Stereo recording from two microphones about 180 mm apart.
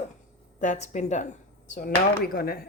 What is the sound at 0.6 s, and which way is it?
Speech, 45° left (ahead or behind).